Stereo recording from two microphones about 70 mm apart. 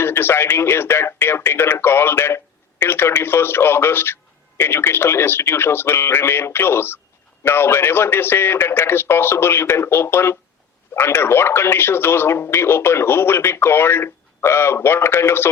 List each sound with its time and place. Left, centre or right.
0.0 s speech: left